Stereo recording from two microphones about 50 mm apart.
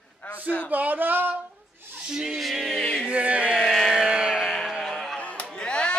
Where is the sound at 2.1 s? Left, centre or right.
Centre.